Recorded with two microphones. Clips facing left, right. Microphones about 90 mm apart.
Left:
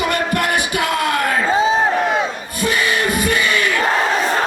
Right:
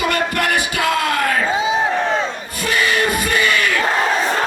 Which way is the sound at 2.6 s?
20° left (ahead or behind).